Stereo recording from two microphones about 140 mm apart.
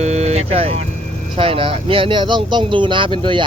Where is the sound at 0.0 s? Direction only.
50° right (ahead or behind).